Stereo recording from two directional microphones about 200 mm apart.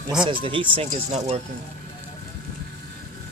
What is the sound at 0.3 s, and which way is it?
Speech, 25° right (ahead or behind).